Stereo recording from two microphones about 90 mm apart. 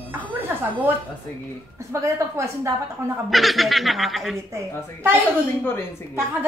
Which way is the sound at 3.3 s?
Centre (ahead or behind).